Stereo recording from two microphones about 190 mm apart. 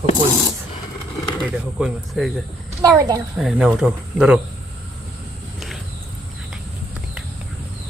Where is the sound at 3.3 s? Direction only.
5° right (ahead or behind).